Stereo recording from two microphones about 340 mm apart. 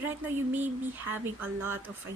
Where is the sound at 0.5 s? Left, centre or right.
Centre.